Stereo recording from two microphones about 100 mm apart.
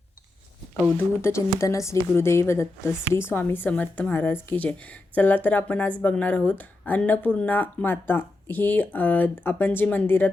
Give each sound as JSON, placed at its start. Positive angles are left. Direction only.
{"t": 0.9, "sound": "speech", "side_deg": 25}